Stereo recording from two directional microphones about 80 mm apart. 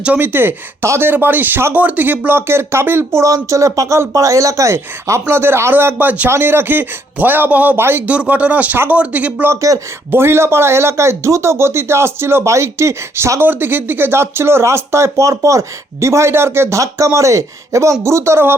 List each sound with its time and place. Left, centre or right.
0.0 s speech: right
8.0 s speech: centre
9.5 s speech: right
10.1 s speech: right